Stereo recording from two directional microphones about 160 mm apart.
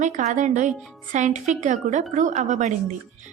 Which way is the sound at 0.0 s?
45° right (ahead or behind).